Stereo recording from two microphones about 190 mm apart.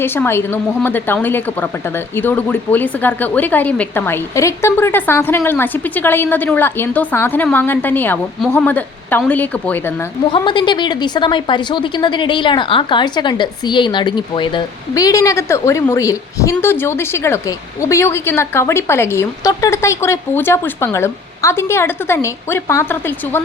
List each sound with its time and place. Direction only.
0.0 s a woman's voice: 10° left (ahead or behind)
10.3 s a woman's voice: 25° left (ahead or behind)